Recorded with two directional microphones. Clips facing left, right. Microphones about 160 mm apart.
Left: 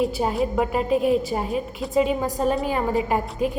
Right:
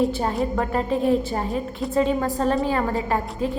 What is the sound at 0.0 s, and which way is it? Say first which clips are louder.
A woman's voice: even; 5° left (ahead or behind).